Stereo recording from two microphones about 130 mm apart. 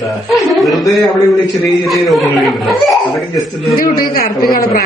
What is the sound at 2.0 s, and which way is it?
A man's voice, centre (ahead or behind).